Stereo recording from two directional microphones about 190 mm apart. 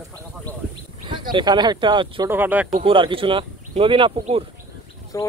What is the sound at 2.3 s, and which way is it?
Speech, 10° right (ahead or behind).